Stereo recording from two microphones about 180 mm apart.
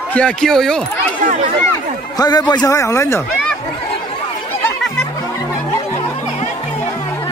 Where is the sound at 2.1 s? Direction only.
20° left (ahead or behind).